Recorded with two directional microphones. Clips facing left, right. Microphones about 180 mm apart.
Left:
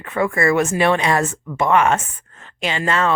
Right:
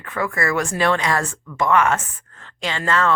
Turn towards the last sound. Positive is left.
turn(degrees=15)  # may be behind; listen again after turning